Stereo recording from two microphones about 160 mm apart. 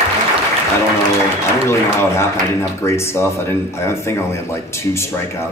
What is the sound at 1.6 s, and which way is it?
Speech, 15° left (ahead or behind).